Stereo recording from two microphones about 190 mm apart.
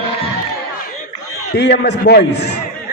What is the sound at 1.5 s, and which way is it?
A man's voice, 60° left (ahead or behind).